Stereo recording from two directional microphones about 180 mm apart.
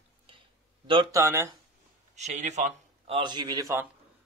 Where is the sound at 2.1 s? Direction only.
40° right (ahead or behind).